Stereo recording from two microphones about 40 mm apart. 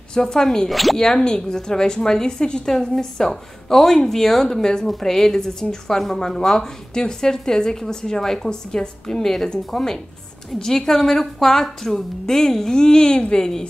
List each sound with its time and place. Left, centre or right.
0.1 s speech: centre
0.7 s speech: centre
0.9 s speech: centre